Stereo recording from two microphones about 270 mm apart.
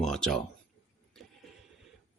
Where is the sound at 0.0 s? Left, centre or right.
Centre.